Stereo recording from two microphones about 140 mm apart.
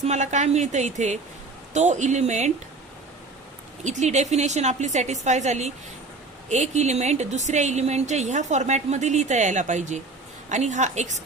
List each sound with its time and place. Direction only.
0.0 s a woman's voice: 55° right (ahead or behind)
3.8 s a woman's voice: 55° right (ahead or behind)